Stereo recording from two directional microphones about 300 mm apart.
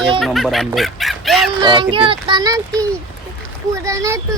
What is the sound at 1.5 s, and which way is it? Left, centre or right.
Speech, centre.